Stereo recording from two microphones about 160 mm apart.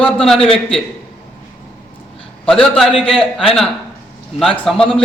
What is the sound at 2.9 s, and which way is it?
Speech, 35° left (ahead or behind).